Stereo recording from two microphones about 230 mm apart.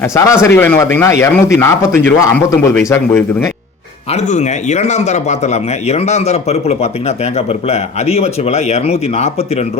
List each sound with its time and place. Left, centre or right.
0.1 s speech: centre
4.1 s speech: left